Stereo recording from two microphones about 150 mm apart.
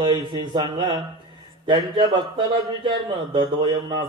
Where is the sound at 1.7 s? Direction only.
30° right (ahead or behind).